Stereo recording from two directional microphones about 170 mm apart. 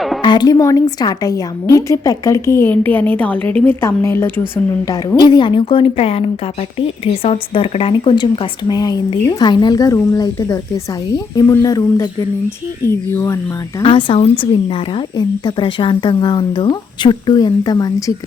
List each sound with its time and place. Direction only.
0.2 s a woman's voice: 25° left (ahead or behind)
13.8 s speech: 30° left (ahead or behind)